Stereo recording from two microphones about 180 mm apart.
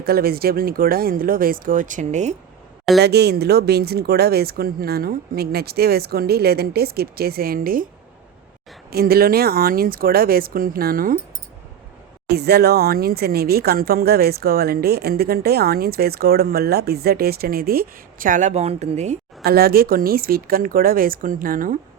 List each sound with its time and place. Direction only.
0.0 s speech: 60° right (ahead or behind); by 2.3 s 40° right (ahead or behind)
3.0 s speech: 65° right (ahead or behind)
8.9 s speech: 55° right (ahead or behind)
12.3 s speech: 65° right (ahead or behind); by 19.2 s 40° right (ahead or behind)
19.5 s speech: 60° right (ahead or behind)